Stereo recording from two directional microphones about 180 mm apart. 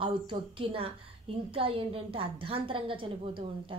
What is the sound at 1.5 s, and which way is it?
Speech, 30° right (ahead or behind).